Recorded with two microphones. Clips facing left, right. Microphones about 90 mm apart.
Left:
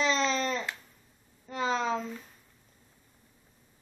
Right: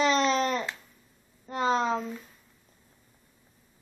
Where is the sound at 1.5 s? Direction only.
45° right (ahead or behind).